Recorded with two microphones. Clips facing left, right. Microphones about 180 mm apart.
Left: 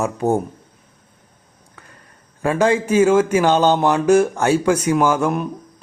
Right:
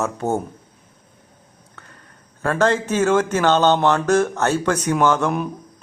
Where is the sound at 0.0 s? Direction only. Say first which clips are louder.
Left 3 dB; 15° left (ahead or behind).